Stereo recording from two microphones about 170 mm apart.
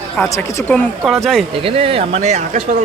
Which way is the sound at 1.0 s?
Centre (ahead or behind).